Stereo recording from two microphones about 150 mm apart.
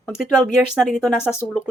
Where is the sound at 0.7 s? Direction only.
Centre (ahead or behind).